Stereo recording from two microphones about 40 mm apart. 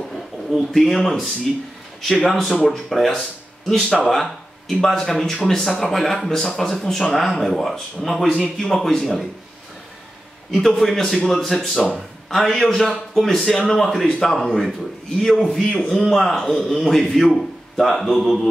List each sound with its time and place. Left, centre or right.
0.1 s speech: centre
8.9 s speech: centre
10.5 s speech: centre
13.5 s speech: centre